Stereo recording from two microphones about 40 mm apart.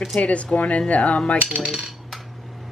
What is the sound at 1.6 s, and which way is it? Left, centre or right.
Coin, centre.